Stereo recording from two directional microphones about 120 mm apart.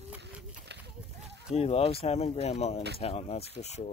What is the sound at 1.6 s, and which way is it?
Speech, 55° left (ahead or behind).